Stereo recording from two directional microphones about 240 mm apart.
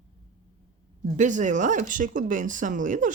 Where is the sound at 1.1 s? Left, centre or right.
Right.